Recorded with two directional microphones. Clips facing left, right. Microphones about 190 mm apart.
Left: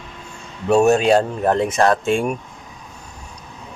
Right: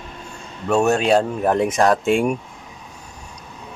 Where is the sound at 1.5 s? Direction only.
15° right (ahead or behind).